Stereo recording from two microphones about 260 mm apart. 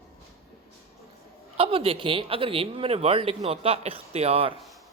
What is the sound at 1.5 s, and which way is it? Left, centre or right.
Speech, right.